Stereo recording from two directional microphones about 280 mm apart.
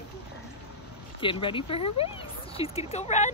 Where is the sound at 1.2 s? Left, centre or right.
Centre.